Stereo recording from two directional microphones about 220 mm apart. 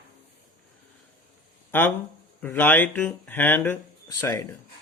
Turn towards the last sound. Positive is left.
turn(degrees=10)  # may be behind; listen again after turning